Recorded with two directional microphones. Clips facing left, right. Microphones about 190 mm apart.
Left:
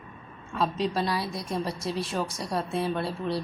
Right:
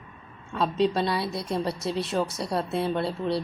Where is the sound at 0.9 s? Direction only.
25° right (ahead or behind).